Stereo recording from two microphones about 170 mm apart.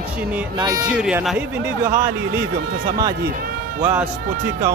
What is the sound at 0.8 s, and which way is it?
Speech, 5° right (ahead or behind).